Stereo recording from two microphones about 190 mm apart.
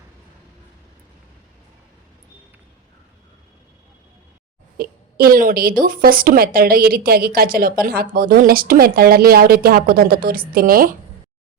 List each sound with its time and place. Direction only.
4.8 s a woman's voice: 50° right (ahead or behind)